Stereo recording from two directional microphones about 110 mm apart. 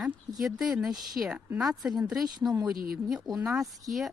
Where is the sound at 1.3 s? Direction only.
15° right (ahead or behind).